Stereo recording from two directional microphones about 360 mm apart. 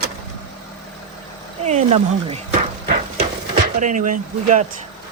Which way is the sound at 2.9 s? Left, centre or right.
Right.